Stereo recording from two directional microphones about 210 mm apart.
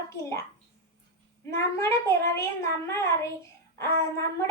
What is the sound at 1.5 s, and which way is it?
Speech, 15° left (ahead or behind).